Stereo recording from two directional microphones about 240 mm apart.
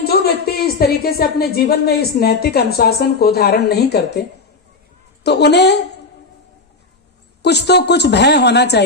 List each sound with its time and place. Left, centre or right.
0.0 s a woman's voice: left
5.2 s a woman's voice: left
7.4 s a woman's voice: left